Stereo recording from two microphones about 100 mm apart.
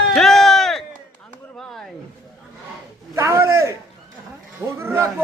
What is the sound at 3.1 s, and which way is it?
Speech, 30° right (ahead or behind).